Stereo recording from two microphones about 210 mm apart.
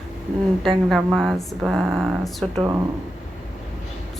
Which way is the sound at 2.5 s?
20° right (ahead or behind).